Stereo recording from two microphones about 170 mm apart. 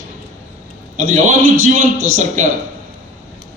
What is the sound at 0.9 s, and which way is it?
A man's voice, 50° right (ahead or behind).